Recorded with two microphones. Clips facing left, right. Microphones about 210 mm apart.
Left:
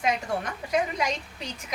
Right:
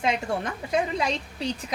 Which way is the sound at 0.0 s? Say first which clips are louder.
Right 1 dB; 30° right (ahead or behind).